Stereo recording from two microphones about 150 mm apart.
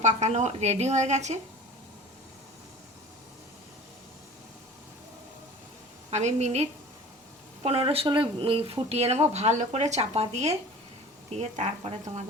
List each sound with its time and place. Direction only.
0.0 s speech: 50° right (ahead or behind)
6.1 s speech: 50° right (ahead or behind)